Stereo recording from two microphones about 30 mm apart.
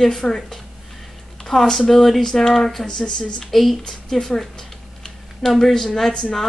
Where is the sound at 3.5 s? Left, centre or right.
Centre.